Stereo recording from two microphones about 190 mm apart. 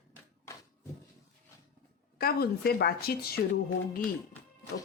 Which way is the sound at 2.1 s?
55° left (ahead or behind).